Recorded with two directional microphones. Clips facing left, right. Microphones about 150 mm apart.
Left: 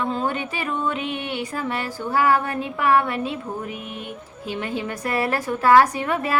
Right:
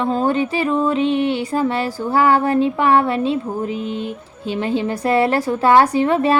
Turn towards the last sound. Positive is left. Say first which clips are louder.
# right 8 dB
turn(degrees=-30)  # may be behind; listen again after turning